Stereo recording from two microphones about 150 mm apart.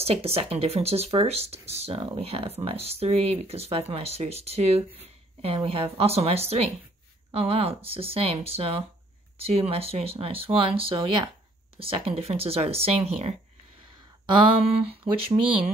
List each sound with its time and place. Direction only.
0.0 s speech: 40° right (ahead or behind)